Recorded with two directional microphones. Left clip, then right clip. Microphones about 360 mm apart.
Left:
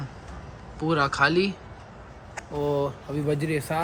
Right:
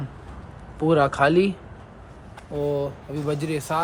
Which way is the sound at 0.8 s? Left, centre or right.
Centre.